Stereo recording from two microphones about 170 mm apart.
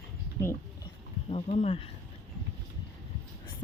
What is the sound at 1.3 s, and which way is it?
Speech, 40° left (ahead or behind).